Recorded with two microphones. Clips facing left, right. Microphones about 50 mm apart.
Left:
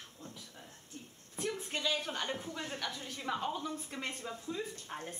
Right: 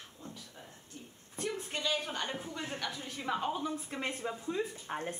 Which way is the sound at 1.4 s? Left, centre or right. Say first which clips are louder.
Even; centre.